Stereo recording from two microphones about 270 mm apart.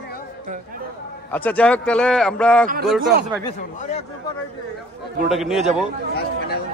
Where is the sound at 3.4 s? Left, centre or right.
Left.